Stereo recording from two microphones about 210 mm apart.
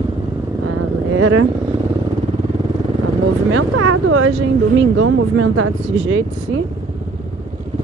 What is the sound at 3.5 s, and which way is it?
Speech, 85° right.